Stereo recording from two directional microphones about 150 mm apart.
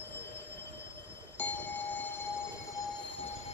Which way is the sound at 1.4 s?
10° left (ahead or behind).